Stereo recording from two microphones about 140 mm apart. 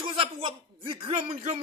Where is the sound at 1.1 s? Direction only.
50° right (ahead or behind).